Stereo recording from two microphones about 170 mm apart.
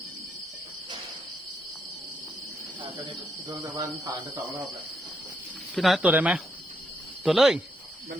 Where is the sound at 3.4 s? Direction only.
20° right (ahead or behind).